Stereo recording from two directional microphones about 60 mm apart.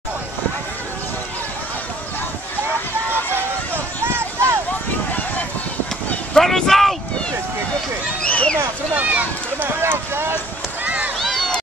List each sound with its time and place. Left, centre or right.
3.3 s run: right
6.3 s vehicle: centre
8.2 s a sound: centre
8.9 s run: right
11.1 s run: centre